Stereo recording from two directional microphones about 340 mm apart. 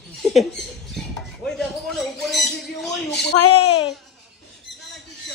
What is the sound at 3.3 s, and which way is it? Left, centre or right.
Speech, left.